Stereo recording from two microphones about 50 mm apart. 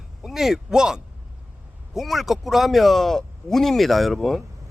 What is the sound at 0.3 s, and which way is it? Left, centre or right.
Speech, centre.